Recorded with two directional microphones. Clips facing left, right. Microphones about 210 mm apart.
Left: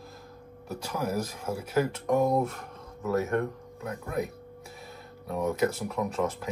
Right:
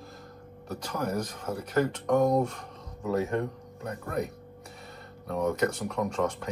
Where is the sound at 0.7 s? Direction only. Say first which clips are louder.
Even; 5° left (ahead or behind).